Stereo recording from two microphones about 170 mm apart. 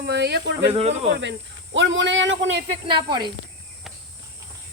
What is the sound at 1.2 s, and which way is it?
Speech, 90° right.